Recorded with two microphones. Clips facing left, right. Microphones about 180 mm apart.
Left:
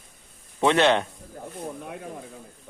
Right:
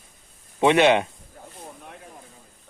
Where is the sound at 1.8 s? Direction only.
70° left (ahead or behind).